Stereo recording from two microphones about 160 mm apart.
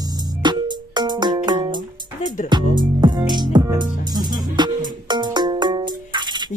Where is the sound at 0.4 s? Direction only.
30° right (ahead or behind).